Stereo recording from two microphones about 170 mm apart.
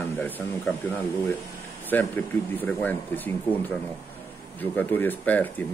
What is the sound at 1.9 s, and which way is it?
A man's voice, 10° left (ahead or behind).